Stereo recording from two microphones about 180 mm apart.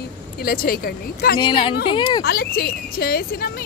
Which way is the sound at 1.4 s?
25° left (ahead or behind).